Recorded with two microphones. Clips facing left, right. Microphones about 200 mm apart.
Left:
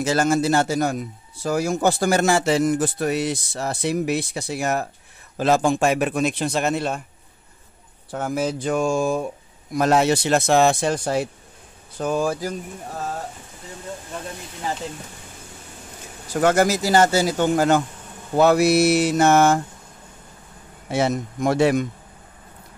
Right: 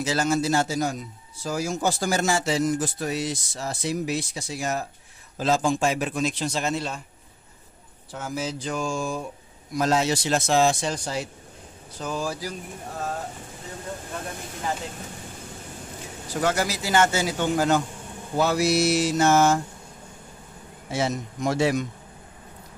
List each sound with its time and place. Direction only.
0.0 s a man's voice: 50° left (ahead or behind)
8.1 s a man's voice: 55° left (ahead or behind)
16.3 s a man's voice: 50° left (ahead or behind)
20.9 s a man's voice: 55° left (ahead or behind)